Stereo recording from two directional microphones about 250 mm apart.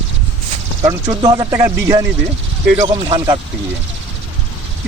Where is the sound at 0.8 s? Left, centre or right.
Centre.